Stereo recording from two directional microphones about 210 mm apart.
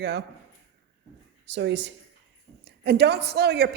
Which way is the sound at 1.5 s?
55° right (ahead or behind).